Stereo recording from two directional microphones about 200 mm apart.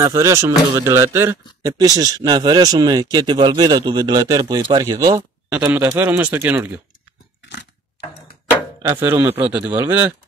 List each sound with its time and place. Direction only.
0.0 s speech: 15° right (ahead or behind)
5.5 s speech: 10° right (ahead or behind)
8.8 s speech: 10° right (ahead or behind)